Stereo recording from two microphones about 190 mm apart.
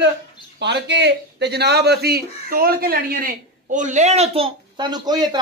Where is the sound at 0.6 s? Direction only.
65° right (ahead or behind).